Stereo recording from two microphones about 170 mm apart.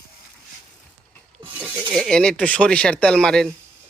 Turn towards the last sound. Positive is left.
turn(degrees=5)  # may be behind; listen again after turning